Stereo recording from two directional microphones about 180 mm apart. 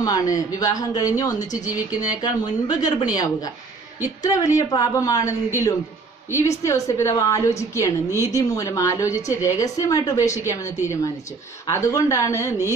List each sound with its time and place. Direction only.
0.0 s a woman's voice: 20° left (ahead or behind)
11.6 s a woman's voice: 15° left (ahead or behind)